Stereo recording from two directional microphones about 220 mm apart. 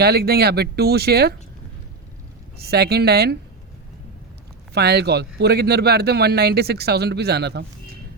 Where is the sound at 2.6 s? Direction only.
45° right (ahead or behind).